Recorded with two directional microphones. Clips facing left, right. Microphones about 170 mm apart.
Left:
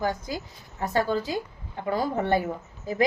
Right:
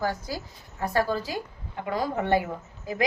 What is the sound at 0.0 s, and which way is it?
A woman's voice, 20° left (ahead or behind).